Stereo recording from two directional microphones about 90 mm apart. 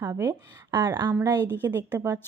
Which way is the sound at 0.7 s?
55° right (ahead or behind).